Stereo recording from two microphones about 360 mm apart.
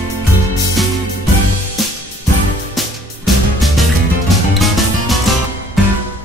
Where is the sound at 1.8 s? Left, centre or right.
Centre.